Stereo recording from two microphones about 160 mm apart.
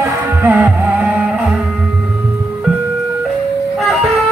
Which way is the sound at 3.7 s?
Centre (ahead or behind).